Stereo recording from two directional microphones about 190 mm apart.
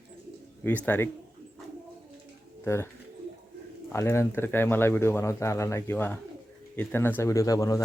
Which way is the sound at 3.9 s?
15° left (ahead or behind).